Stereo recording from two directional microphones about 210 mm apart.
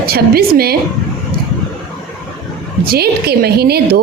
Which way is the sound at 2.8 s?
50° right (ahead or behind).